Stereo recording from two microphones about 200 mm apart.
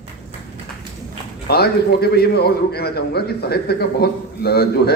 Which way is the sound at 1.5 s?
50° left (ahead or behind).